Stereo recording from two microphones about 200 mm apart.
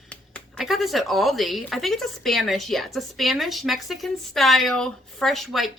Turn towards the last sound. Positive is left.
turn(degrees=0)  # may be behind; listen again after turning